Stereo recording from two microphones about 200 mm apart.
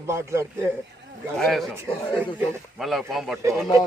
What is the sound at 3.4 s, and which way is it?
Speech, 15° right (ahead or behind).